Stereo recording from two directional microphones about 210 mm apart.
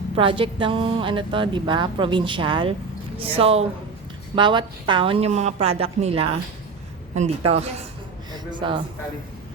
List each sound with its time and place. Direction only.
0.2 s a woman's voice: 25° right (ahead or behind)